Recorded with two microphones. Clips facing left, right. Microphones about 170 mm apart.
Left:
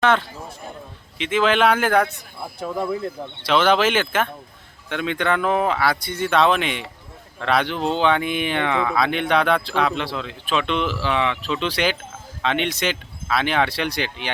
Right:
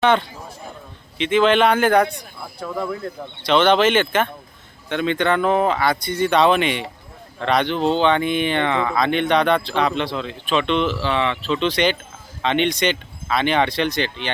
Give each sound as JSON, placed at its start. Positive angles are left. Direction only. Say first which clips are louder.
{"t": 0.0, "sound": "speech", "louder": "right 2 dB", "side_deg": 0}
{"t": 2.6, "sound": "speech", "louder": "left 1 dB", "side_deg": 15}
{"t": 3.4, "sound": "speech", "louder": "right 2 dB", "side_deg": 5}